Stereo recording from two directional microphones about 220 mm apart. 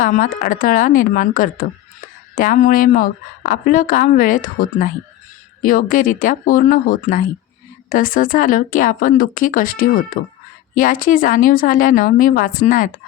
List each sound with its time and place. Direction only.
0.0 s a woman's voice: 40° left (ahead or behind)